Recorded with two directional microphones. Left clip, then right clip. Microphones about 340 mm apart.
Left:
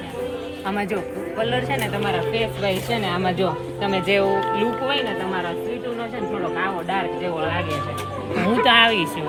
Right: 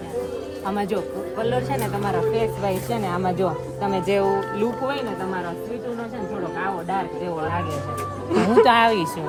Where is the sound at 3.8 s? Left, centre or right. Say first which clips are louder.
Left 2 dB; centre.